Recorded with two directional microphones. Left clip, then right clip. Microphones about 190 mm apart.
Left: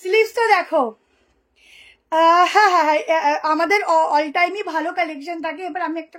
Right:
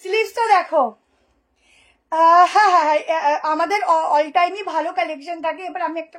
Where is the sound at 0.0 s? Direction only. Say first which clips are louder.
Left 3 dB; 25° left (ahead or behind).